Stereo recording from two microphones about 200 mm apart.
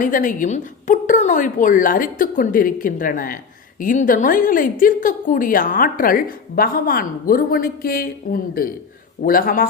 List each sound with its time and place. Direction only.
0.0 s a woman's voice: 40° left (ahead or behind)